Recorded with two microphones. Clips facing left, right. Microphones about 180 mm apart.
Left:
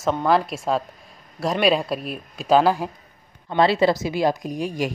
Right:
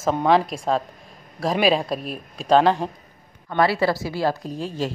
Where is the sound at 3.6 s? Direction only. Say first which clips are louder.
Left 2 dB; 20° left (ahead or behind).